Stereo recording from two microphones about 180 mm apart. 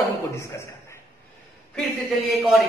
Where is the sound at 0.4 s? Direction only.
15° left (ahead or behind).